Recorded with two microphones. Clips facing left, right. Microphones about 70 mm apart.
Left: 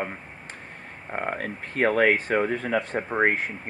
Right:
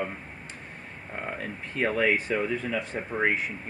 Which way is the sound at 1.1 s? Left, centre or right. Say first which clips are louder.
Left 5 dB; left.